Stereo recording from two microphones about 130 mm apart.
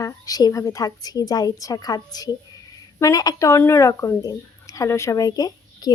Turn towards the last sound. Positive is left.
turn(degrees=30)  # may be behind; listen again after turning